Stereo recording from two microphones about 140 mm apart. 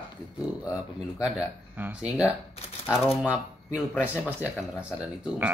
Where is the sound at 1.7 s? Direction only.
10° right (ahead or behind).